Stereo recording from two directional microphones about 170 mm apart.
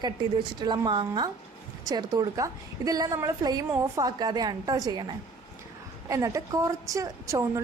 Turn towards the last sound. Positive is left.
turn(degrees=-20)  # may be behind; listen again after turning